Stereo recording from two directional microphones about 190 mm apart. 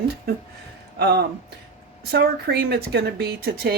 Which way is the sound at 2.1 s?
60° right (ahead or behind).